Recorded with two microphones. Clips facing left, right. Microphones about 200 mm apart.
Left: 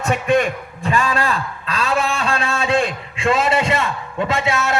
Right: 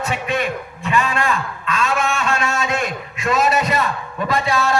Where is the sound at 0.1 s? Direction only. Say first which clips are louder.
Left 8 dB; 50° left (ahead or behind).